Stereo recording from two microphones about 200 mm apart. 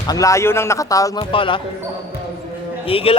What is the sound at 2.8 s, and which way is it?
Speech, 30° left (ahead or behind).